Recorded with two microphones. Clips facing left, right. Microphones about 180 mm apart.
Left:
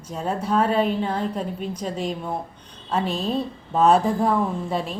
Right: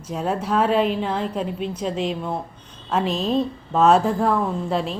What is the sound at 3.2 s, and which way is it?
Speech, 5° left (ahead or behind).